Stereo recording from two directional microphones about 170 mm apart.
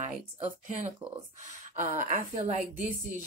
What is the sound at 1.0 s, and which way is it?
Speech, 10° right (ahead or behind).